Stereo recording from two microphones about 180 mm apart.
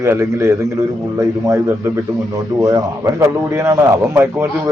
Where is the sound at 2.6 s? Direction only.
15° right (ahead or behind).